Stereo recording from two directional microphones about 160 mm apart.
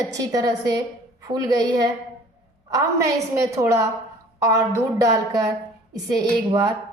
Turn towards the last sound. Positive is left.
turn(degrees=-25)  # may be behind; listen again after turning